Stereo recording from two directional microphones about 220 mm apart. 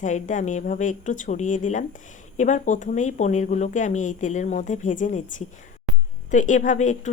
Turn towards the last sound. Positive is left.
turn(degrees=35)  # may be behind; listen again after turning